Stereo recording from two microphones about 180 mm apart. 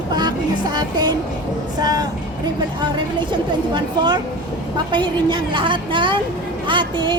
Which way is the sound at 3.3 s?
25° right (ahead or behind).